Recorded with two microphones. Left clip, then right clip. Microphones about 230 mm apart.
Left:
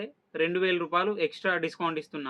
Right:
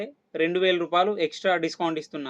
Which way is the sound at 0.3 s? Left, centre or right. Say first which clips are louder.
Right 4 dB; centre.